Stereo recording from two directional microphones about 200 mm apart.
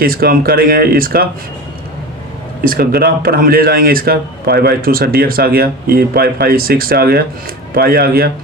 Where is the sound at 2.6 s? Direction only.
45° right (ahead or behind).